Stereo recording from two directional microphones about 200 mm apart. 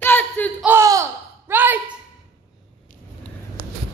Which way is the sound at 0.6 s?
15° right (ahead or behind).